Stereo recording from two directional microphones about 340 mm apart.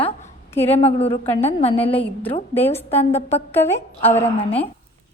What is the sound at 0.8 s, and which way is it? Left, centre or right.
A woman's voice, centre.